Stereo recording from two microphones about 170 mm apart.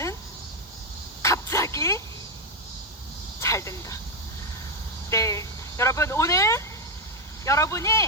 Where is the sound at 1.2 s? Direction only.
15° left (ahead or behind).